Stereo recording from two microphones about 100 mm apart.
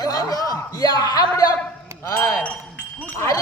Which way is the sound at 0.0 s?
40° left (ahead or behind).